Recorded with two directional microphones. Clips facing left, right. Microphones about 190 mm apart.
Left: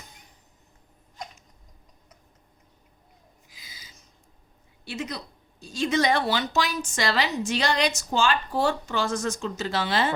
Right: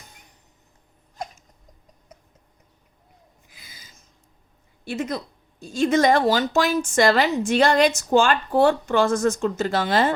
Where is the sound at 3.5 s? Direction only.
55° right (ahead or behind).